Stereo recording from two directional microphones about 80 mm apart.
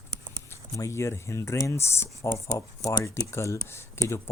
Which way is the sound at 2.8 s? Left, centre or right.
Left.